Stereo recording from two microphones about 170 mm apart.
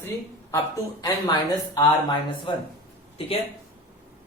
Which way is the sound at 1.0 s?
25° left (ahead or behind).